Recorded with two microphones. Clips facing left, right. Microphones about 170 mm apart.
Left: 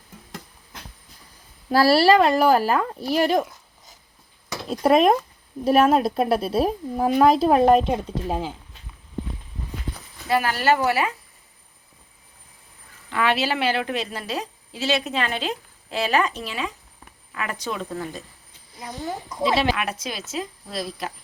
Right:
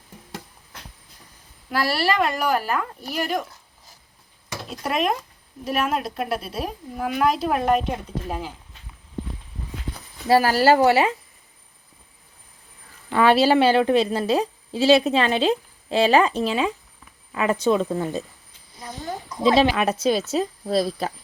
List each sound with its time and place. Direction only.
1.7 s speech: 30° left (ahead or behind)
4.7 s speech: 35° left (ahead or behind)
10.2 s a woman's voice: 35° right (ahead or behind)
13.1 s a woman's voice: 35° right (ahead or behind)
19.7 s a woman's voice: 30° right (ahead or behind)